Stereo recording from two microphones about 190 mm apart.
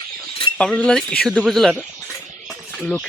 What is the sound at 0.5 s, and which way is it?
Speech, 5° left (ahead or behind).